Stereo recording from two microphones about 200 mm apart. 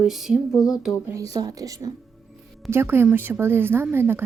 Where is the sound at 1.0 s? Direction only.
15° right (ahead or behind).